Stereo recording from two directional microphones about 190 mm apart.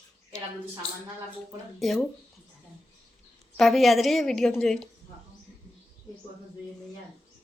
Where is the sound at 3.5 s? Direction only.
Centre (ahead or behind).